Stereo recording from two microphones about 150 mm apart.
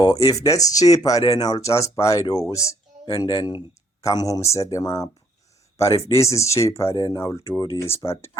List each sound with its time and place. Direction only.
0.0 s speech: 25° left (ahead or behind)